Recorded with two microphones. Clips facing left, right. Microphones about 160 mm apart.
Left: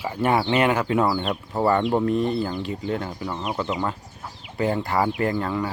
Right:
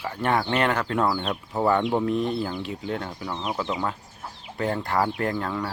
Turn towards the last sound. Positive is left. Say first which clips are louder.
# left 3 dB
turn(degrees=0)  # may be behind; listen again after turning